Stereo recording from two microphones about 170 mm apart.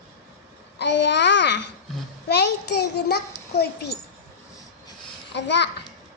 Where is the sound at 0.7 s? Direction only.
90° left.